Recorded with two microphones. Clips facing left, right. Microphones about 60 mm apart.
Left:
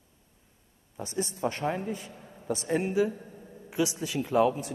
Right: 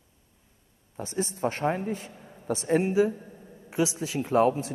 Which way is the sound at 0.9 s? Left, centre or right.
Right.